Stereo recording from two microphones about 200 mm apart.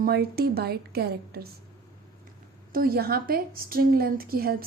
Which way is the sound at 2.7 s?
50° right (ahead or behind).